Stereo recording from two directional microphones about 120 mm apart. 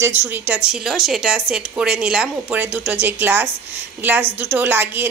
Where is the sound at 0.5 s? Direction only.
10° right (ahead or behind).